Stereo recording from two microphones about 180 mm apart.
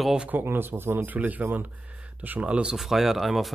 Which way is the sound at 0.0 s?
5° right (ahead or behind).